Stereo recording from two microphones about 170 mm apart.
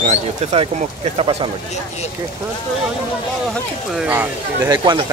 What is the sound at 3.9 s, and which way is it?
Speech, 5° right (ahead or behind).